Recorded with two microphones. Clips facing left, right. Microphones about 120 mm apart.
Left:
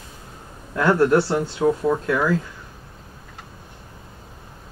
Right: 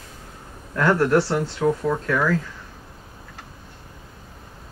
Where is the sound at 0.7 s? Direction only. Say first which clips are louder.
Left 1 dB; 20° left (ahead or behind).